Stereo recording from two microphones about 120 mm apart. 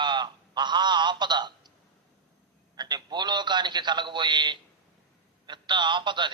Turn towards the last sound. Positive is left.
turn(degrees=-40)  # may be behind; listen again after turning